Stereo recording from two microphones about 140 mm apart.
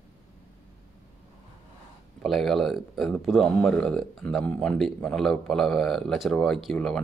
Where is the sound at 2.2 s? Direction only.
Centre (ahead or behind).